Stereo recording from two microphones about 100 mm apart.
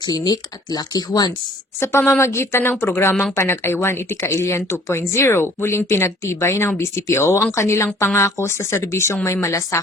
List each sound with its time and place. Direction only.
0.0 s speech: 40° left (ahead or behind)
1.8 s speech: 25° left (ahead or behind)